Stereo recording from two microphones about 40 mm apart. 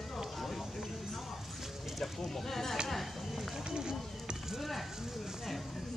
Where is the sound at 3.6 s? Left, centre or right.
Centre.